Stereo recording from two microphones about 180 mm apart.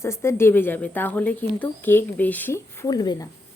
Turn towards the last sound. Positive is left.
turn(degrees=20)  # may be behind; listen again after turning